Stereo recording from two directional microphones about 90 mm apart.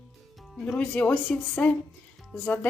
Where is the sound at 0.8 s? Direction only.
15° left (ahead or behind).